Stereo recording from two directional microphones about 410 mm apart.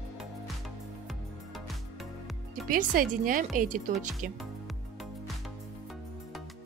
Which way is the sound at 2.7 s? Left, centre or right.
Centre.